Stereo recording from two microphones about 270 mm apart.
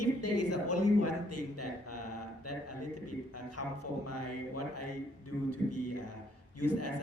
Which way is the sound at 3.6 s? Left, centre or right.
Left.